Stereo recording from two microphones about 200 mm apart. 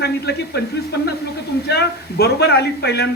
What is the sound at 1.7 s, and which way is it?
A man's voice, 55° left (ahead or behind).